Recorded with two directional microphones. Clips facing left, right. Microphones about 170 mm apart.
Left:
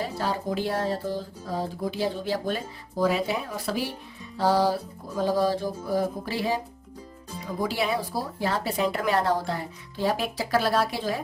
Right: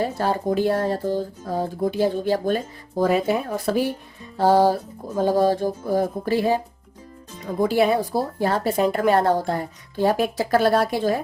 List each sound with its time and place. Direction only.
0.0 s speech: 50° right (ahead or behind)
7.6 s speech: 50° right (ahead or behind)